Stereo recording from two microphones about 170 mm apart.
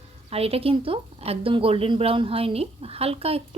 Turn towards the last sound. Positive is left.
turn(degrees=-35)  # may be behind; listen again after turning